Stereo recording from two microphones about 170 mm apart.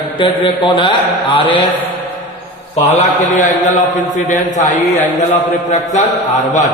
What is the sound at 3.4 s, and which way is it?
Mantra, 50° left (ahead or behind).